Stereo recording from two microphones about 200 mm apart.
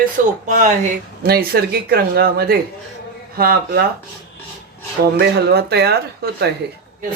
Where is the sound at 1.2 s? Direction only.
50° right (ahead or behind).